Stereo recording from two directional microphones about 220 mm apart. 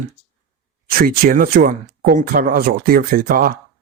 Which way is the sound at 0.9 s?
40° right (ahead or behind).